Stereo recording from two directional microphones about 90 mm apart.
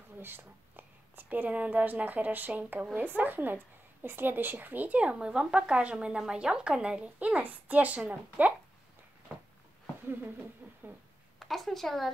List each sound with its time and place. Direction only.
0.2 s a woman's voice: 25° right (ahead or behind)
10.6 s a sound: 15° right (ahead or behind)
11.3 s speech: centre (ahead or behind)